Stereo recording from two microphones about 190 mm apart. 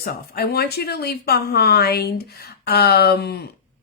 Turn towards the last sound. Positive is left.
turn(degrees=55)  # may be behind; listen again after turning